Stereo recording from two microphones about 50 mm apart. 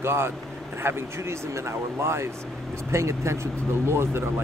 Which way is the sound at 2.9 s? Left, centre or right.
Right.